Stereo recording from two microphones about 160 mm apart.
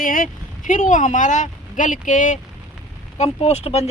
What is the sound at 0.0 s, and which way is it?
Speech, 60° left (ahead or behind).